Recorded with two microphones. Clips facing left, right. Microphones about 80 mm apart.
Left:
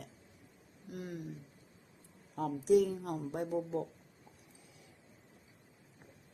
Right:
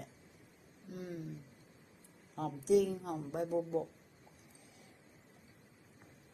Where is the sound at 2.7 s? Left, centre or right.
Left.